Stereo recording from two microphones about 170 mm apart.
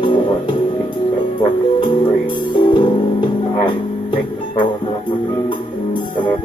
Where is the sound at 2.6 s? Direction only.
25° left (ahead or behind).